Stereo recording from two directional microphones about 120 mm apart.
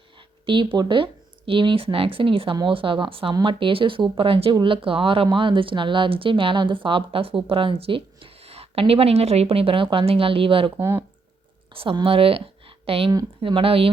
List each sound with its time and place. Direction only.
0.4 s speech: 45° right (ahead or behind)
10.8 s speech: 20° right (ahead or behind)
11.7 s speech: 50° right (ahead or behind)